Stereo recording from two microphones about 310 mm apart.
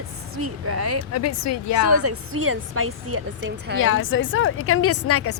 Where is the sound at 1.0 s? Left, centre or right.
Left.